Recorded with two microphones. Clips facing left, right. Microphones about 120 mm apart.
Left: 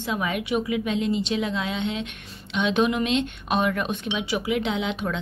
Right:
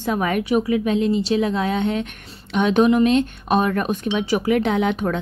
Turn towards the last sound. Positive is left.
turn(degrees=-50)  # may be behind; listen again after turning